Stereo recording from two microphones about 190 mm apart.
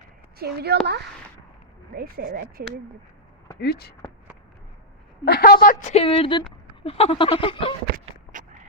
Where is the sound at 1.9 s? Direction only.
50° right (ahead or behind).